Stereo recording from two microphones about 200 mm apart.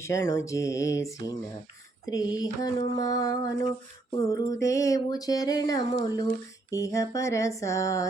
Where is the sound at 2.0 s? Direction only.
20° left (ahead or behind).